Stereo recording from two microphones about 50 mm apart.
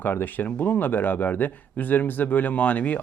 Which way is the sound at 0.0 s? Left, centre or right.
Left.